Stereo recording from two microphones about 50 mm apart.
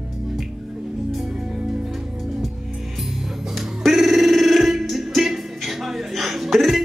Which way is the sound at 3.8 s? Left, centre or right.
Centre.